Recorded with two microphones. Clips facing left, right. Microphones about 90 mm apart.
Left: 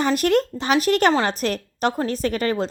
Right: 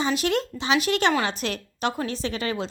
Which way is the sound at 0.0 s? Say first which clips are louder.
Left 5 dB; 50° left (ahead or behind).